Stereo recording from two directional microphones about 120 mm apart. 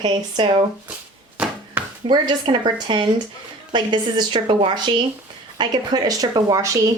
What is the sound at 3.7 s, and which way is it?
Speech, 35° right (ahead or behind).